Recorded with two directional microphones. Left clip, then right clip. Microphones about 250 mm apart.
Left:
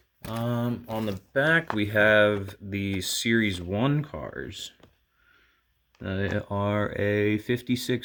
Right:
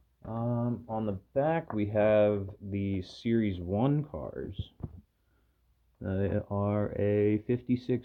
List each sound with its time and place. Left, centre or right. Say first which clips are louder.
0.2 s speech: left 4 dB; left
6.0 s speech: left 3 dB; left